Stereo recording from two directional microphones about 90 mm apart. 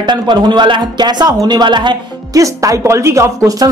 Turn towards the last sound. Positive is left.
turn(degrees=-40)  # may be behind; listen again after turning